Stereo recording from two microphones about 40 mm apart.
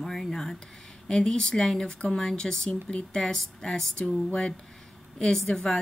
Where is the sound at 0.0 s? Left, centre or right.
Centre.